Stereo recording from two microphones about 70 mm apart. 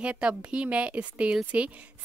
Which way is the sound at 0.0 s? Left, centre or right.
Centre.